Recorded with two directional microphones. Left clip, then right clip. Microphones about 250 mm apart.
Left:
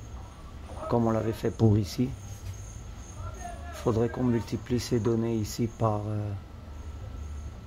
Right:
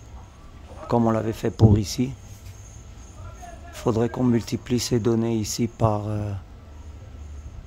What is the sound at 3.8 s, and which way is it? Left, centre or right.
Speech, right.